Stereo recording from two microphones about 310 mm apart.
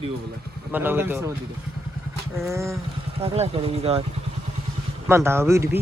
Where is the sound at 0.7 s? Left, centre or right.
Centre.